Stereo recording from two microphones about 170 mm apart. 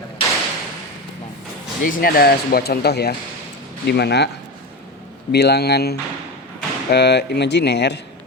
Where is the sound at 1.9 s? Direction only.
60° left (ahead or behind); by 4.3 s 80° left.